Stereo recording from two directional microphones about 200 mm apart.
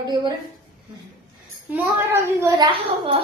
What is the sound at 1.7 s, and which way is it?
A child's voice, 10° right (ahead or behind).